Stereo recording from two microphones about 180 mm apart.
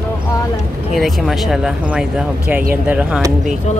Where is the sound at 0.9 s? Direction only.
Centre (ahead or behind).